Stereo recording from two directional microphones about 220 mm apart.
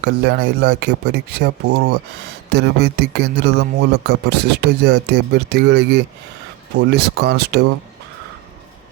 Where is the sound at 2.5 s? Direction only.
50° right (ahead or behind).